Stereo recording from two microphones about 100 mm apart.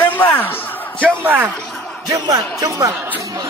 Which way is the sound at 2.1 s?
40° right (ahead or behind).